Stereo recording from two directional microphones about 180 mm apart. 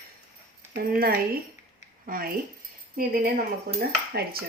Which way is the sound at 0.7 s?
55° right (ahead or behind).